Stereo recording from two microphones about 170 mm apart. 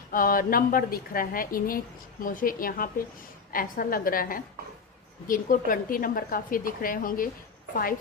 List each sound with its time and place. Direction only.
0.1 s a woman's voice: 55° left (ahead or behind)